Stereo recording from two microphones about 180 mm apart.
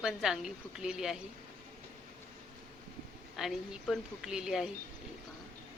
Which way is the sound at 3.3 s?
Centre (ahead or behind).